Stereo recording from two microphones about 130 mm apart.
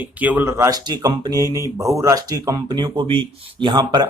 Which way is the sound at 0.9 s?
35° right (ahead or behind).